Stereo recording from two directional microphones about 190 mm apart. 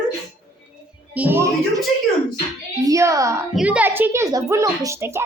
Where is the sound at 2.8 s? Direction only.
15° right (ahead or behind).